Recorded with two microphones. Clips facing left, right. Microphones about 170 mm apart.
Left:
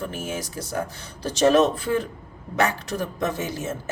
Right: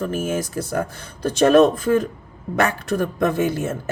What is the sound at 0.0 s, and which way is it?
A man's voice, 45° right (ahead or behind).